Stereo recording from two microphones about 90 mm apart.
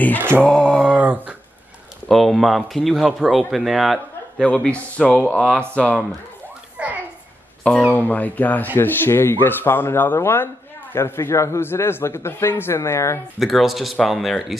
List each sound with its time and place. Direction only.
0.2 s mantra: 20° right (ahead or behind)
0.5 s speech: 5° left (ahead or behind)
0.8 s a sound: 15° right (ahead or behind)
2.0 s speech: centre (ahead or behind)
4.4 s speech: 10° left (ahead or behind)
6.8 s a sound: 15° right (ahead or behind)
7.9 s speech: 20° left (ahead or behind)
13.4 s speech: centre (ahead or behind)